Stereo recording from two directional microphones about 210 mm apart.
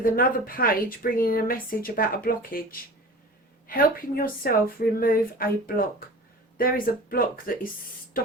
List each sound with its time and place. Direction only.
0.0 s a woman's voice: 45° left (ahead or behind)